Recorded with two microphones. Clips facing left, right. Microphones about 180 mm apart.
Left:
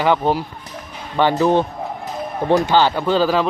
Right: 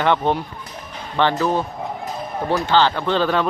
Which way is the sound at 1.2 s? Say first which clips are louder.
Left 4 dB; 15° left (ahead or behind).